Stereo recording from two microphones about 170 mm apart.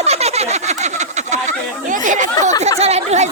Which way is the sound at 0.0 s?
40° right (ahead or behind).